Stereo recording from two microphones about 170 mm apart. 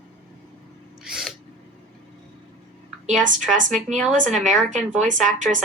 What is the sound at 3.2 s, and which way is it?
Speech, 50° right (ahead or behind).